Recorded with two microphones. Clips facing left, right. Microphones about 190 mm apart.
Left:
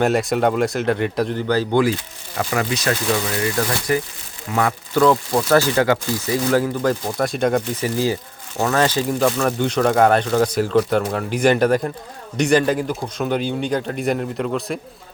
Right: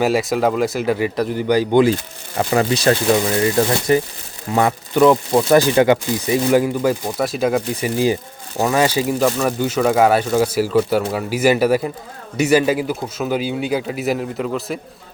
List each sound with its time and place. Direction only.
0.0 s a man's voice: centre (ahead or behind)
1.4 s speech: 15° right (ahead or behind)
2.4 s speech: 30° right (ahead or behind); by 7.9 s 5° right (ahead or behind)
7.9 s a man's voice: 15° right (ahead or behind)